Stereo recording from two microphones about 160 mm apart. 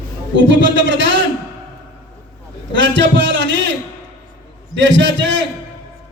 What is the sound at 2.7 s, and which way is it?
A man's voice, 90° right.